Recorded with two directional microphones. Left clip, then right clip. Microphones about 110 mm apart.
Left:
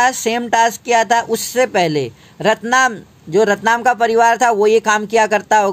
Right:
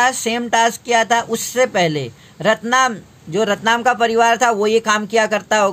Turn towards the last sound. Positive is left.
turn(degrees=50)  # may be behind; listen again after turning